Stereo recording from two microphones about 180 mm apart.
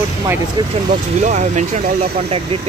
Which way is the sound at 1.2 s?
40° right (ahead or behind).